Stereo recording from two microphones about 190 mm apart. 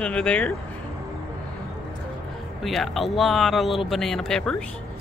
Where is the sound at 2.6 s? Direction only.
Centre (ahead or behind).